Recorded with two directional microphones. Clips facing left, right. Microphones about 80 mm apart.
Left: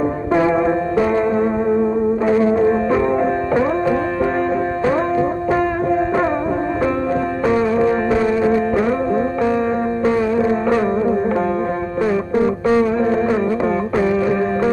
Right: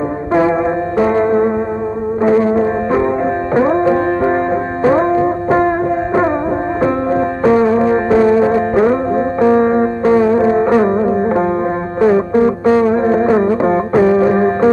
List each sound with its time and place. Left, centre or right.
0.3 s music: right
0.9 s music: right
6.8 s music: right